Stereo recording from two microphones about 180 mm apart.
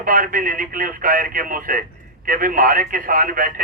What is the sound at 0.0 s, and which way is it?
A man's voice, 50° right (ahead or behind).